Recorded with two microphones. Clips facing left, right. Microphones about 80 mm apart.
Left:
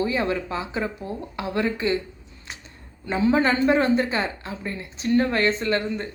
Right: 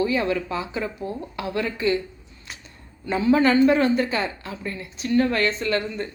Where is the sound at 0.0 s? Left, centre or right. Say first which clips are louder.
Right 1 dB; left.